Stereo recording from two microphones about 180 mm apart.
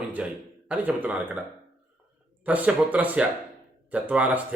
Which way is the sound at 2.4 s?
10° right (ahead or behind).